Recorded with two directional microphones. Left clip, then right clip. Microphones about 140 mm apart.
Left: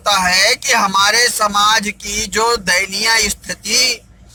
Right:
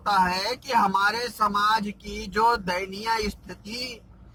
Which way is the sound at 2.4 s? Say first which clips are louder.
Left 8 dB; 5° left (ahead or behind).